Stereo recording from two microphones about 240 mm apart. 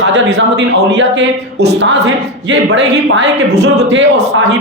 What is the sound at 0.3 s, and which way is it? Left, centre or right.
Speech, right.